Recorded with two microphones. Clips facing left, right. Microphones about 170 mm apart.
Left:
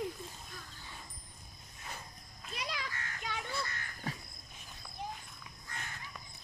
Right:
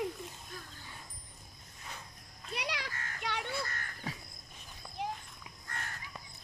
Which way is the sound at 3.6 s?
45° right (ahead or behind).